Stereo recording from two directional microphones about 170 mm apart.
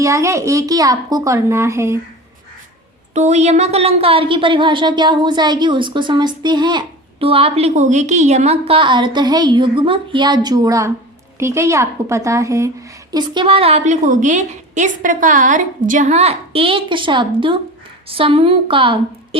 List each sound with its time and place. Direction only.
0.0 s a child's voice: 20° right (ahead or behind)
3.2 s a woman's voice: 40° right (ahead or behind)